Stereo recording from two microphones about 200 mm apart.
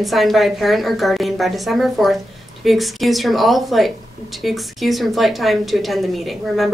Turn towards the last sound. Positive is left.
turn(degrees=0)  # may be behind; listen again after turning